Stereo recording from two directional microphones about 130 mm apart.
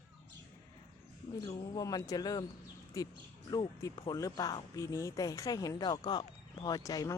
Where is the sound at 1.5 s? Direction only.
30° left (ahead or behind).